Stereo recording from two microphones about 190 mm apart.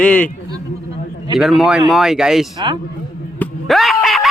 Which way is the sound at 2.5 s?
25° right (ahead or behind).